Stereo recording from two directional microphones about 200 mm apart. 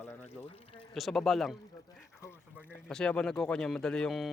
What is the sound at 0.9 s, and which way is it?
Speech, centre (ahead or behind).